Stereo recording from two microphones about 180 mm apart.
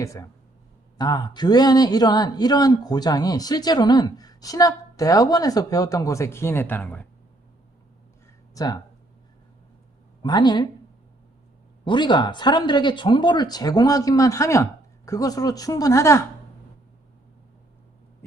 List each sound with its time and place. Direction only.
0.0 s a man's voice: 15° left (ahead or behind)
8.5 s speech: 20° left (ahead or behind)
10.2 s a man's voice: 25° left (ahead or behind)
11.9 s a man's voice: 25° left (ahead or behind)